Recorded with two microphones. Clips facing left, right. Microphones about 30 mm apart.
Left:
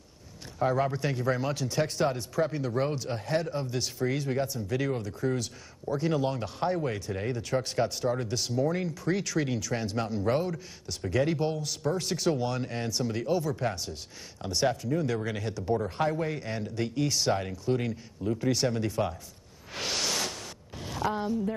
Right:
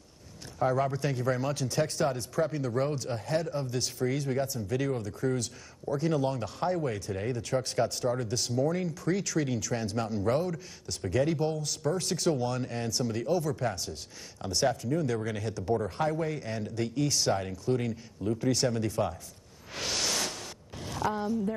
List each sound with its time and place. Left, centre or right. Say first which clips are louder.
0.7 s speech: left 1 dB; left
10.5 s speech: even; centre
11.1 s speech: left 1 dB; left
11.6 s speech: even; centre
12.3 s speech: left 1 dB; left
16.0 s speech: left 1 dB; left
19.7 s a sound: left 1 dB; centre
21.1 s speech: left 1 dB; centre